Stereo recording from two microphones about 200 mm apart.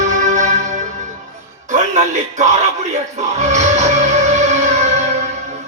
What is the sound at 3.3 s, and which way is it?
Music, 35° right (ahead or behind).